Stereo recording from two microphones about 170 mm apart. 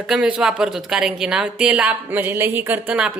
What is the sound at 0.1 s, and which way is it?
Speech, 5° right (ahead or behind).